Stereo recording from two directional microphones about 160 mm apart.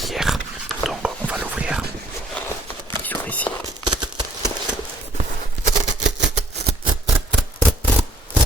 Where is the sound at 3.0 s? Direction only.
10° left (ahead or behind).